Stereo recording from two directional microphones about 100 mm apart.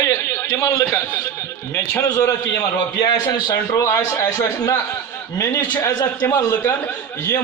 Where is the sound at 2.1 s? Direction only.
30° left (ahead or behind).